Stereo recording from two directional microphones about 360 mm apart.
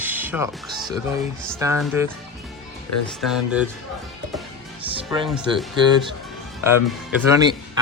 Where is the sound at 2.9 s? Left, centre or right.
Left.